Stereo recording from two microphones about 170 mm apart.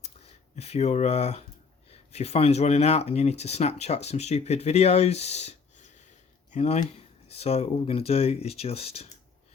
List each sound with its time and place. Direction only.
0.5 s speech: 40° left (ahead or behind)